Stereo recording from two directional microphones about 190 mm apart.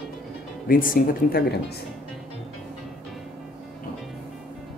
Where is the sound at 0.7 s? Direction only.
50° left (ahead or behind).